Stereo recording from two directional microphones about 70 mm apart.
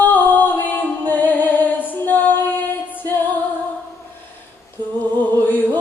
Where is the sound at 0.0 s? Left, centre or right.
Left.